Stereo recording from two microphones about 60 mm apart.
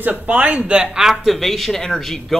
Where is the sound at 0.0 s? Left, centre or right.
Right.